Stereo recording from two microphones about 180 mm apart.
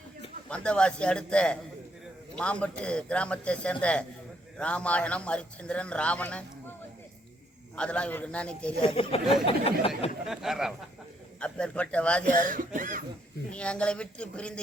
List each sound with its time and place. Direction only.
0.4 s a man's voice: 5° left (ahead or behind)
7.8 s a man's voice: 5° left (ahead or behind)
8.8 s speech: 30° left (ahead or behind)
10.2 s a man's voice: centre (ahead or behind)
12.5 s speech: 50° right (ahead or behind)
13.5 s a man's voice: 5° left (ahead or behind)